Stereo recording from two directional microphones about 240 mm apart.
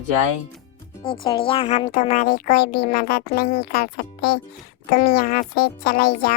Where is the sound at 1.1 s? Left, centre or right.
Left.